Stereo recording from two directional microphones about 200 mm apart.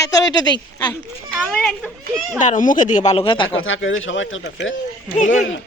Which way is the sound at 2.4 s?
40° left (ahead or behind).